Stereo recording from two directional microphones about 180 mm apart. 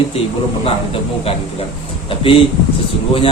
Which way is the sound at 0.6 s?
30° left (ahead or behind).